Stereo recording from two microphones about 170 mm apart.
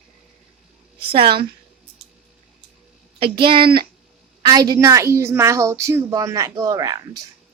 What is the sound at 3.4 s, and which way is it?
A woman's voice, 30° right (ahead or behind).